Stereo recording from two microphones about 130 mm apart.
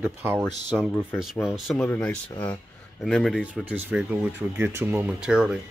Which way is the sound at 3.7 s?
10° right (ahead or behind).